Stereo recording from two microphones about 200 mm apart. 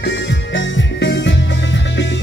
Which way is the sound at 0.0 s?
65° left (ahead or behind).